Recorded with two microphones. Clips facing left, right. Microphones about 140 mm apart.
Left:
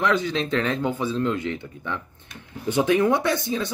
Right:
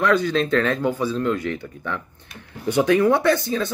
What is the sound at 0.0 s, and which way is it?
Speech, 20° left (ahead or behind).